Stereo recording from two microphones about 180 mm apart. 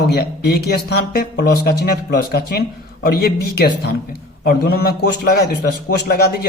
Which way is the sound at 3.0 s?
60° left (ahead or behind).